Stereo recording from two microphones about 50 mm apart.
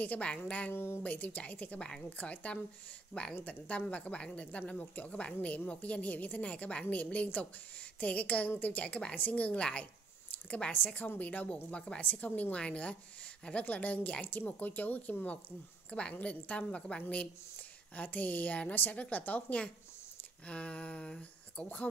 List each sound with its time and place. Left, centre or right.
0.0 s speech: left
0.7 s speech: left
1.0 s speech: left
8.8 s speech: left
9.1 s speech: left
12.0 s speech: left
20.4 s speech: left